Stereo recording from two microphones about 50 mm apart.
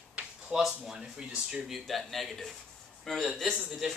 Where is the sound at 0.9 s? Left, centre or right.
Centre.